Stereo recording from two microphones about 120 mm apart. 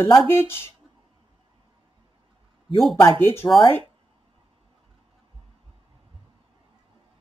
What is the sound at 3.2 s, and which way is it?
Speech, 20° left (ahead or behind).